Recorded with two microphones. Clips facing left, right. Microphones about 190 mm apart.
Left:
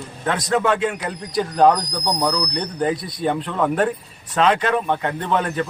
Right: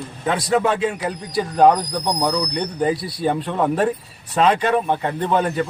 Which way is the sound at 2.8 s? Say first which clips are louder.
Right 1 dB; 30° right (ahead or behind).